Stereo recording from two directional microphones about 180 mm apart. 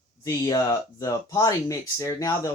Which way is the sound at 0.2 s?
20° left (ahead or behind).